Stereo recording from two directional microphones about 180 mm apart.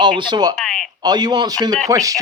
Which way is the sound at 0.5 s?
5° left (ahead or behind).